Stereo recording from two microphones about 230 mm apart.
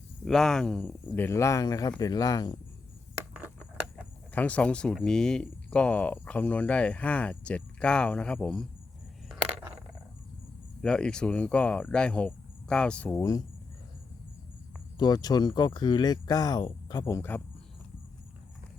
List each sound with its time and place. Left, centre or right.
0.3 s speech: centre
4.4 s speech: centre
10.8 s speech: centre
14.9 s speech: centre